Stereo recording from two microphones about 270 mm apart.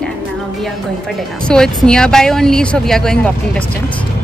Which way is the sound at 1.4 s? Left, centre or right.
Centre.